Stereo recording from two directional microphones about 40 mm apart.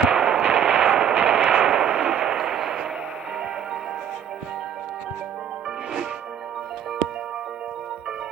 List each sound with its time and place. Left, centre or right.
0.0 s artillery fire: right
0.9 s artillery fire: centre
1.1 s artillery fire: right
1.5 s artillery fire: centre
2.2 s a sound: centre